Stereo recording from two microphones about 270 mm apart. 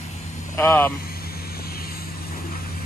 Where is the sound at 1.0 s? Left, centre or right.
Left.